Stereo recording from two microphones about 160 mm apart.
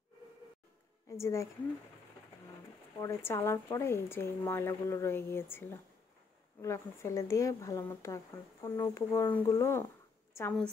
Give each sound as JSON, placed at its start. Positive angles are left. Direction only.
{"t": 1.0, "sound": "a woman's voice", "side_deg": 20}
{"t": 3.0, "sound": "a woman's voice", "side_deg": 15}